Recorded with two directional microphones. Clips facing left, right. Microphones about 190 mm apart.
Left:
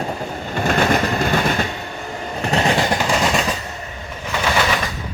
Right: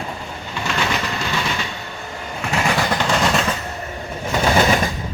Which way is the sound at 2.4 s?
35° left (ahead or behind).